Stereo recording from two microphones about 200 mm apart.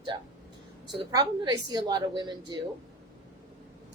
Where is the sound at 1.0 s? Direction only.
20° right (ahead or behind).